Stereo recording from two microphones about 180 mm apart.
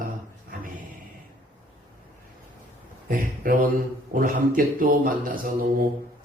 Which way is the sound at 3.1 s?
50° right (ahead or behind).